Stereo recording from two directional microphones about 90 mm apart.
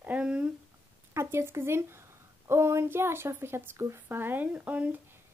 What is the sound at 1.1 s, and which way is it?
Speech, 25° right (ahead or behind).